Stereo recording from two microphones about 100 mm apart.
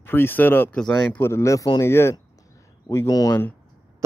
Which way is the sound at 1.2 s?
30° left (ahead or behind).